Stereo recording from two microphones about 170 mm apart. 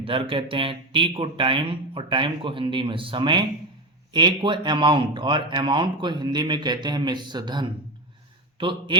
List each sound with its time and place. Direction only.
0.0 s a man's voice: 30° right (ahead or behind)